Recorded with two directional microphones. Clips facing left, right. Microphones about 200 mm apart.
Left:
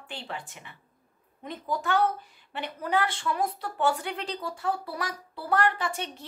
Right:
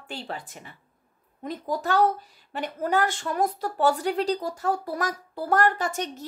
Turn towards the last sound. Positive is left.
turn(degrees=-45)  # may be behind; listen again after turning